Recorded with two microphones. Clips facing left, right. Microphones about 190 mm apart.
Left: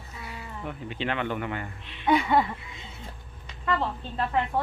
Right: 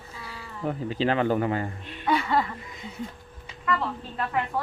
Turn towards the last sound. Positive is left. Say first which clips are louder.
# left 1 dB
turn(degrees=25)  # may be behind; listen again after turning